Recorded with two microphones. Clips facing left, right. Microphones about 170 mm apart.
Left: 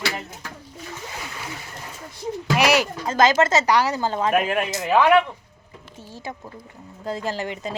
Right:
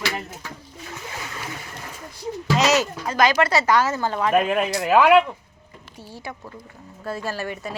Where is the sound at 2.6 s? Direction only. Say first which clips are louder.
Even; 15° left (ahead or behind).